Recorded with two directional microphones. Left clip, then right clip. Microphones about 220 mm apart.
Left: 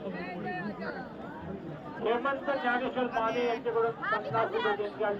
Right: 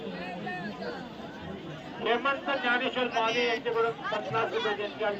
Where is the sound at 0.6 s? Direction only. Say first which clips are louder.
Right 1 dB; 35° right (ahead or behind).